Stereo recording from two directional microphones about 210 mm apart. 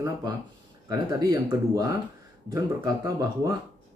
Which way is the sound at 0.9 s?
15° right (ahead or behind).